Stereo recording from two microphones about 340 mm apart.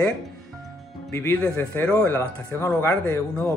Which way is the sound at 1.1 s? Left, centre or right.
Centre.